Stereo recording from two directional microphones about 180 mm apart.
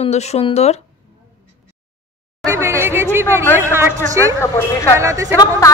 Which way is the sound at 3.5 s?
15° right (ahead or behind).